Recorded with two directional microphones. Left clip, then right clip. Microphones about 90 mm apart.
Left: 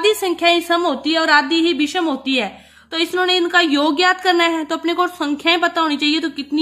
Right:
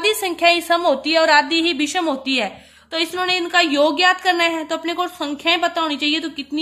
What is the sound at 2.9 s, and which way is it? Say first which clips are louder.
A woman's voice: left 3 dB; 35° left (ahead or behind).